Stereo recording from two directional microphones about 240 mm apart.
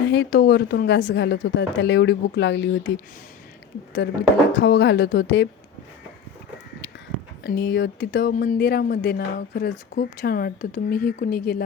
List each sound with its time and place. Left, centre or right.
0.0 s a woman's voice: left
4.5 s a woman's voice: left
7.4 s speech: left